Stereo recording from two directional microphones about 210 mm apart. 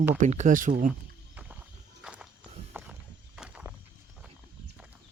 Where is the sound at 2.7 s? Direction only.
5° right (ahead or behind).